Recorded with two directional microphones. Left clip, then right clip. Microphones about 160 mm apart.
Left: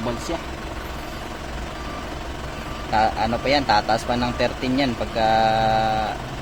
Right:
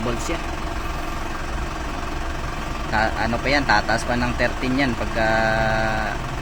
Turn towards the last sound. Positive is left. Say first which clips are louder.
# left 2 dB
turn(degrees=15)  # may be behind; listen again after turning